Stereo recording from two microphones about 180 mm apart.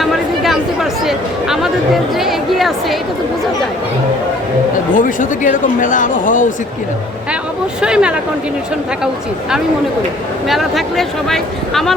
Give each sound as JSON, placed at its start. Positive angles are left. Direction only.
{"t": 0.0, "sound": "a sound", "side_deg": 0}
{"t": 2.1, "sound": "speech", "side_deg": 0}
{"t": 4.9, "sound": "speech", "side_deg": 45}
{"t": 7.8, "sound": "speech", "side_deg": -5}
{"t": 10.5, "sound": "speech", "side_deg": 0}